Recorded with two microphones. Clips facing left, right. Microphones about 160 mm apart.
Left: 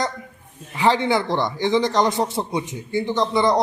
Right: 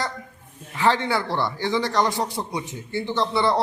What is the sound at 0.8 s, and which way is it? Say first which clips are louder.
A man's voice: left 3 dB; 15° left (ahead or behind).